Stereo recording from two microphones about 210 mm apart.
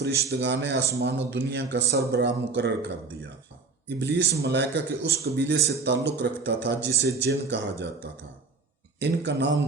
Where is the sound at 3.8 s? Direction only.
55° right (ahead or behind).